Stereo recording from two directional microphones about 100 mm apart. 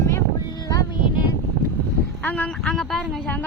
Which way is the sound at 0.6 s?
40° left (ahead or behind).